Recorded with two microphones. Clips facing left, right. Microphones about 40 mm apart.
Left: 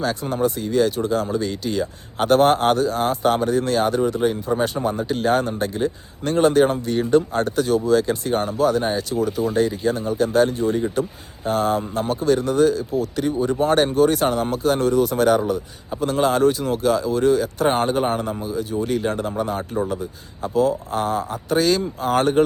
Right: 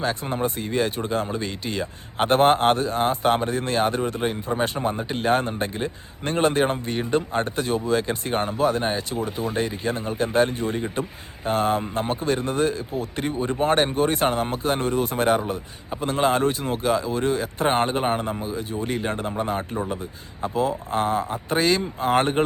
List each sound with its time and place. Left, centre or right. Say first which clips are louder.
0.0 s speech: left 3 dB; right
4.8 s speech: left 3 dB; right